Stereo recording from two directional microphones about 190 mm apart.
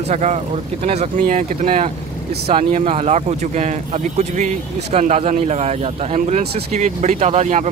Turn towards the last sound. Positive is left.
turn(degrees=-35)  # may be behind; listen again after turning